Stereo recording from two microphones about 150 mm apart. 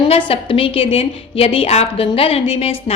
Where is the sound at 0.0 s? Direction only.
35° left (ahead or behind).